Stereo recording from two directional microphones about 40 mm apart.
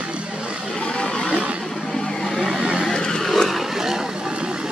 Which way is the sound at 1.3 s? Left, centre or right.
Right.